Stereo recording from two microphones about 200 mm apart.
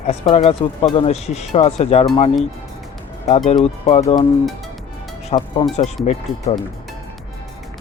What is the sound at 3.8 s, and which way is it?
Speech, 30° left (ahead or behind).